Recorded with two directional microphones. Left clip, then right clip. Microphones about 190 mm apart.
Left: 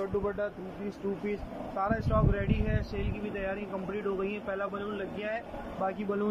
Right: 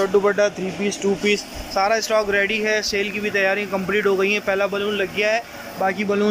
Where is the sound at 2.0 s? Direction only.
5° right (ahead or behind).